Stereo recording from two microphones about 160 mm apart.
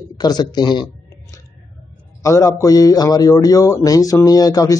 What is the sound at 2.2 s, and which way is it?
Speech, 20° left (ahead or behind).